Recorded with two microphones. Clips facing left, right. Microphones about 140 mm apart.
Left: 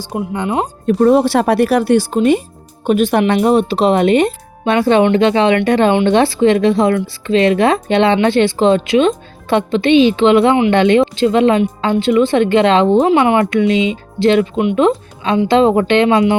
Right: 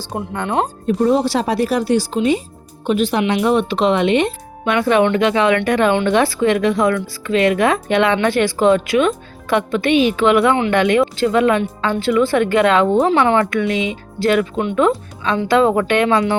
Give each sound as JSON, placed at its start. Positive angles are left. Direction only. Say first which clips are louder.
{"t": 0.0, "sound": "speech", "louder": "left 4 dB", "side_deg": 10}
{"t": 0.9, "sound": "speech", "louder": "left 6 dB", "side_deg": 60}
{"t": 4.6, "sound": "speech", "louder": "left 3 dB", "side_deg": 30}